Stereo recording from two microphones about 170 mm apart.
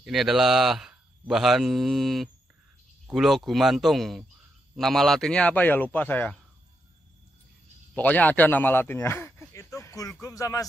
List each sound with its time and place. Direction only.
0.0 s speech: centre (ahead or behind)
7.9 s speech: 10° left (ahead or behind)